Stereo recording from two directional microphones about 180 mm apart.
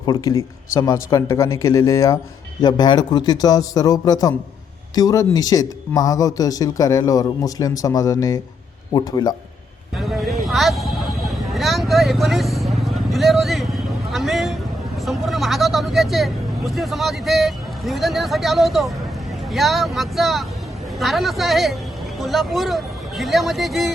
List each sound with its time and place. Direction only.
0.0 s speech: 20° left (ahead or behind)
10.0 s a sound: centre (ahead or behind)
15.0 s speech: centre (ahead or behind)